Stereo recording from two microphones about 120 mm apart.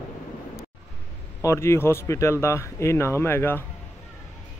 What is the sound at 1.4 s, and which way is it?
Speech, 25° left (ahead or behind).